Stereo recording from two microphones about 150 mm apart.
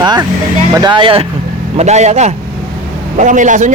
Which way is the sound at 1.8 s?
50° right (ahead or behind).